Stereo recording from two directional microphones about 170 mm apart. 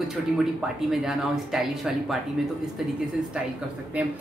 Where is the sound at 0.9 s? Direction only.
5° right (ahead or behind).